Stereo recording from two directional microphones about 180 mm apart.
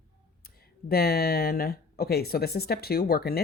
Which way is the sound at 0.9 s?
60° left (ahead or behind).